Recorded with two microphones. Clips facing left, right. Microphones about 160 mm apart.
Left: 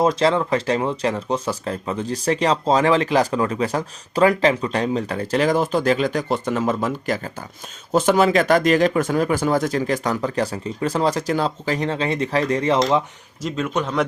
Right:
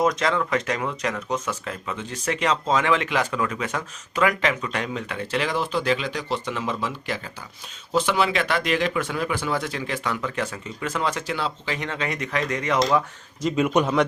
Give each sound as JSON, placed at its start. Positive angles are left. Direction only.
{"t": 0.0, "sound": "speech", "side_deg": 30}
{"t": 13.6, "sound": "a man's voice", "side_deg": -10}